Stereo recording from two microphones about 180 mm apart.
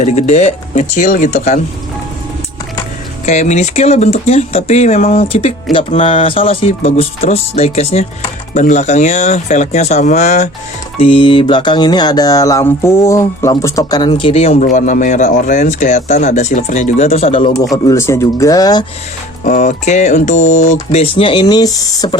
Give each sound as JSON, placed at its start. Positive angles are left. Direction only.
{"t": 0.0, "sound": "music", "side_deg": 40}
{"t": 3.2, "sound": "music", "side_deg": 40}
{"t": 17.8, "sound": "speech", "side_deg": 15}
{"t": 19.5, "sound": "music", "side_deg": 45}
{"t": 20.9, "sound": "speech", "side_deg": 30}